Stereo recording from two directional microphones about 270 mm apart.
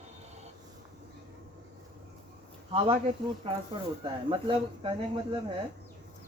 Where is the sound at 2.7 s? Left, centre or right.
Centre.